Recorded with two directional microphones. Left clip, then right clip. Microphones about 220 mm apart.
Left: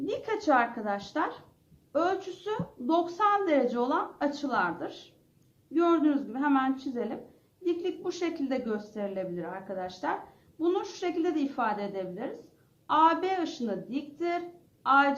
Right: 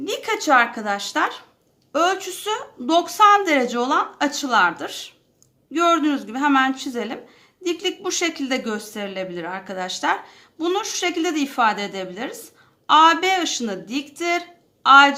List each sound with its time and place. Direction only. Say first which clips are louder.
0.0 s a woman's voice: right 7 dB; 20° right (ahead or behind)